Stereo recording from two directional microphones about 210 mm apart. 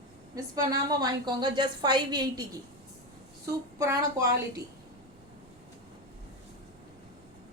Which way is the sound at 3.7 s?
15° right (ahead or behind).